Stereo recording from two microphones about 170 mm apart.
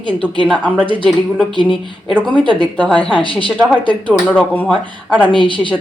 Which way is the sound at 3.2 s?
30° left (ahead or behind).